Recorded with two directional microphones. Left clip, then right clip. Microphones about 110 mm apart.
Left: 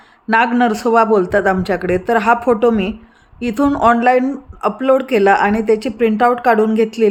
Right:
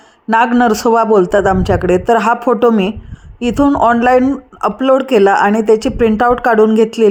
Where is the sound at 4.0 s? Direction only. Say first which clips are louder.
Right 3 dB; 40° right (ahead or behind).